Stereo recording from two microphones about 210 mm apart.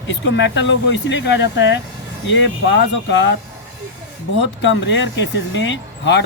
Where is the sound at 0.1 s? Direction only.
55° left (ahead or behind).